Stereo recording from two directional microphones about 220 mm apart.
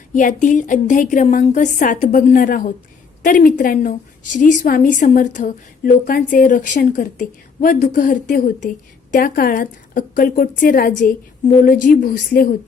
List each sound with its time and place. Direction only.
0.1 s a woman's voice: 35° left (ahead or behind)